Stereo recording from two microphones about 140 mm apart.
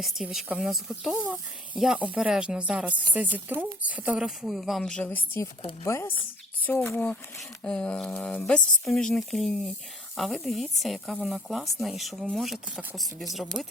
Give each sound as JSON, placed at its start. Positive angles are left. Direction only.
{"t": 0.0, "sound": "speech", "side_deg": 0}